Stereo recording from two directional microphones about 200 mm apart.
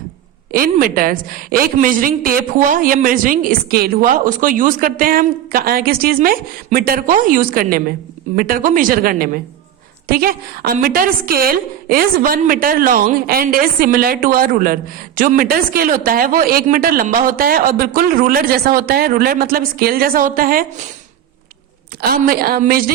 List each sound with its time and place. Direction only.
0.5 s a woman's voice: 45° right (ahead or behind)
22.1 s a woman's voice: 45° right (ahead or behind)